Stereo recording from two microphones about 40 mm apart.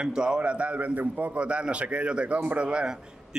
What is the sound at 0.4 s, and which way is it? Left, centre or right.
A man's voice, right.